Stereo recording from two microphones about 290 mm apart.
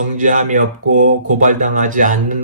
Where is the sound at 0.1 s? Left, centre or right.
Right.